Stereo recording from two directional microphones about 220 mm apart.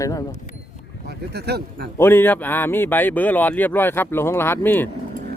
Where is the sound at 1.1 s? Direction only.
45° right (ahead or behind).